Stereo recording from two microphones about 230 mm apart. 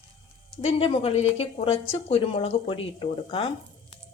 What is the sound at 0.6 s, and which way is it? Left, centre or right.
Speech, left.